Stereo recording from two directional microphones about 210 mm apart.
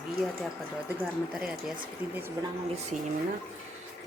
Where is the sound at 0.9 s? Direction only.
5° right (ahead or behind).